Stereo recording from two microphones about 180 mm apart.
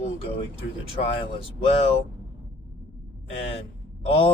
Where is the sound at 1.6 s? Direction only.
30° left (ahead or behind).